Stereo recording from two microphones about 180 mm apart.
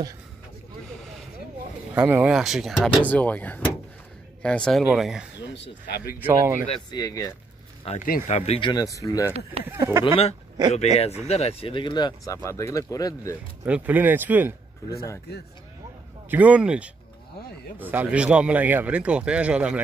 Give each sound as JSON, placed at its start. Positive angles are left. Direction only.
{"t": 2.0, "sound": "speech", "side_deg": -10}
{"t": 3.1, "sound": "speech", "side_deg": 10}
{"t": 5.5, "sound": "speech", "side_deg": 70}
{"t": 6.1, "sound": "speech", "side_deg": -10}
{"t": 6.7, "sound": "speech", "side_deg": 20}
{"t": 8.0, "sound": "speech", "side_deg": 50}
{"t": 9.3, "sound": "speech", "side_deg": -35}
{"t": 9.7, "sound": "speech", "side_deg": -15}
{"t": 10.0, "sound": "speech", "side_deg": 30}
{"t": 13.7, "sound": "speech", "side_deg": -10}
{"t": 16.3, "sound": "speech", "side_deg": -10}